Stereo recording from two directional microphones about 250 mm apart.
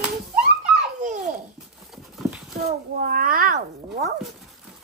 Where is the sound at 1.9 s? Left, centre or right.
Centre.